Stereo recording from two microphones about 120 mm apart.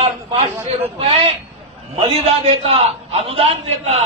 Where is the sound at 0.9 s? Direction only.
55° right (ahead or behind).